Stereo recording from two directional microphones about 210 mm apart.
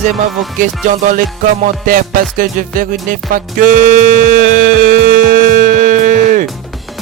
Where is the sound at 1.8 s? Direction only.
40° right (ahead or behind).